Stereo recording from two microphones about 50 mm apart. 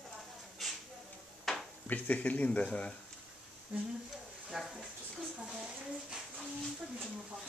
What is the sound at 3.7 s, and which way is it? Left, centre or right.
Speech, right.